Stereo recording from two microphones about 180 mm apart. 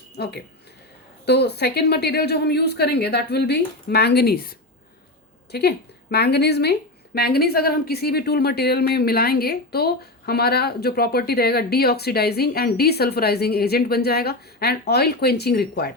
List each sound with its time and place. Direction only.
0.2 s speech: 65° left (ahead or behind)